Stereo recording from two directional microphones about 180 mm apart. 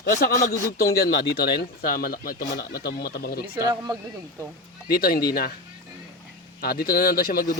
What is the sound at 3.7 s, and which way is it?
Speech, 20° right (ahead or behind).